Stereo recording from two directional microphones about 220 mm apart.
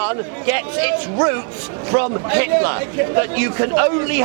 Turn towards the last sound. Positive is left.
turn(degrees=-15)  # may be behind; listen again after turning